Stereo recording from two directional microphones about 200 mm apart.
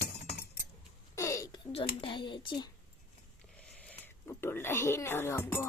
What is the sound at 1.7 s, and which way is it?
Speech, 25° left (ahead or behind).